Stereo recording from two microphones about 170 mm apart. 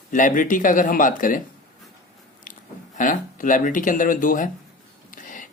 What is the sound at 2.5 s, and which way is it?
Chewing, 50° left (ahead or behind).